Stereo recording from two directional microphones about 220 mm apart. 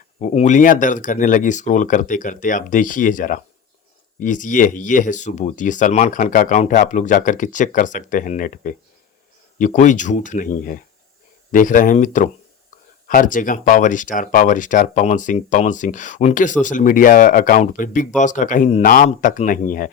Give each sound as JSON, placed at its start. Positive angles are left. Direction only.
{"t": 0.2, "sound": "speech", "side_deg": 35}